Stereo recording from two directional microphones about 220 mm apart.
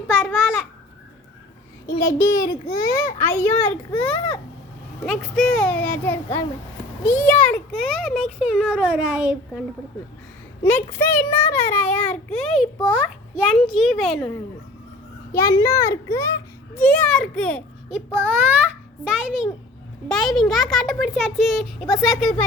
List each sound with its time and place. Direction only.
0.1 s a sound: 10° left (ahead or behind)
1.9 s a child's voice: 15° left (ahead or behind)
5.0 s a child's voice: centre (ahead or behind)
8.5 s a child's voice: 5° right (ahead or behind)
10.6 s a child's voice: 10° left (ahead or behind)
15.3 s a child's voice: 15° left (ahead or behind)